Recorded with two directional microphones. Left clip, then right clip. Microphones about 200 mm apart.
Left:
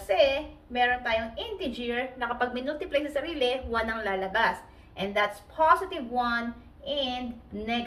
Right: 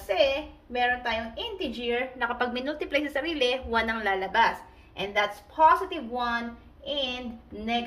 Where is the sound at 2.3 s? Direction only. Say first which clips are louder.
Even; 50° right (ahead or behind).